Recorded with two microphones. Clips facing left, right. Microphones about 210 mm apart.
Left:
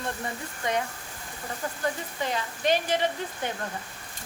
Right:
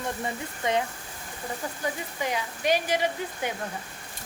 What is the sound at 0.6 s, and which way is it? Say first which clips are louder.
Speech: right 2 dB; 20° right (ahead or behind).